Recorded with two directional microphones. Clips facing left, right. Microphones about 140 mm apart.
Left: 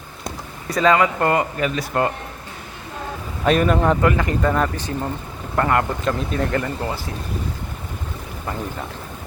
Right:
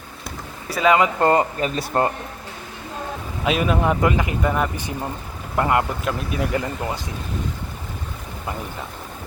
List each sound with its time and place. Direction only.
0.7 s speech: 10° right (ahead or behind)
0.9 s speech: 20° right (ahead or behind)
1.3 s speech: 30° right (ahead or behind)
3.4 s speech: 5° right (ahead or behind)